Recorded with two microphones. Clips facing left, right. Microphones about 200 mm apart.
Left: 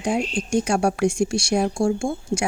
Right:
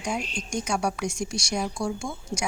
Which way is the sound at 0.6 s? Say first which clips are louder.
Left 7 dB; 55° left (ahead or behind).